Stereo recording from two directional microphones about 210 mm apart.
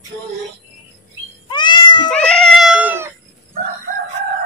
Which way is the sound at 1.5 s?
20° left (ahead or behind).